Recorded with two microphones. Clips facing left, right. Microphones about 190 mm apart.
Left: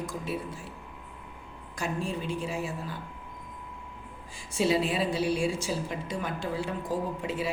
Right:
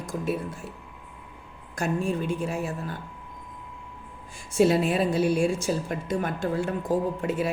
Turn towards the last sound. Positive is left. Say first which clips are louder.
# right 5 dB
turn(degrees=-50)  # may be behind; listen again after turning